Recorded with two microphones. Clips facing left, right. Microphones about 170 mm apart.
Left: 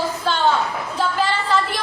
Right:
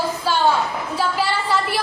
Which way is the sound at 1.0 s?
10° right (ahead or behind).